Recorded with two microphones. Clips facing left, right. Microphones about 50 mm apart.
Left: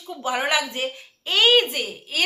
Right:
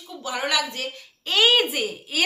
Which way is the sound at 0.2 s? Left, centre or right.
Left.